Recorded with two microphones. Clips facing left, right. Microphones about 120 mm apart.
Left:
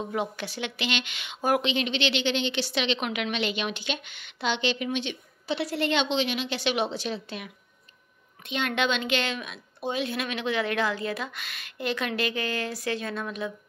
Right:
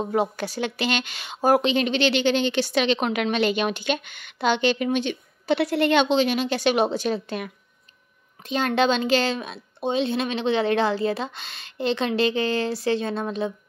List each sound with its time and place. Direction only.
0.0 s speech: 40° right (ahead or behind)
8.5 s a woman's voice: 35° right (ahead or behind)